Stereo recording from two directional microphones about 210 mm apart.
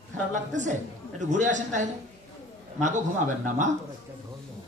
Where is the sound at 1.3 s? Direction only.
35° right (ahead or behind).